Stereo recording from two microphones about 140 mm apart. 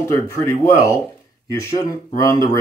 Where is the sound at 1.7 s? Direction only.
25° left (ahead or behind).